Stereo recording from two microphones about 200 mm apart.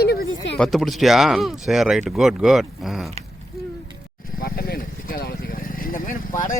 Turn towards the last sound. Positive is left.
turn(degrees=40)  # may be behind; listen again after turning